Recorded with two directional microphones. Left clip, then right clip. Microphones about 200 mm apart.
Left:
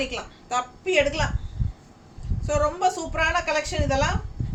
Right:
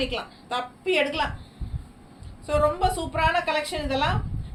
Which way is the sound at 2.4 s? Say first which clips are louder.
Even; 15° left (ahead or behind).